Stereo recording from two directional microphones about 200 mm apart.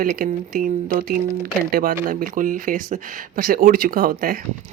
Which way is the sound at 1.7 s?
45° right (ahead or behind).